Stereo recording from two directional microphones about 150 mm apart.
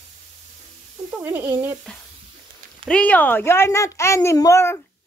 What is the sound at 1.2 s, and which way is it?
Speech, 15° right (ahead or behind).